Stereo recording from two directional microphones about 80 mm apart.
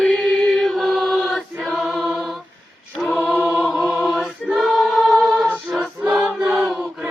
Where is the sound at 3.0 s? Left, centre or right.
Left.